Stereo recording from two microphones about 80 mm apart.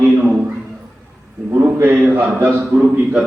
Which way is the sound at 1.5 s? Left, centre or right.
Right.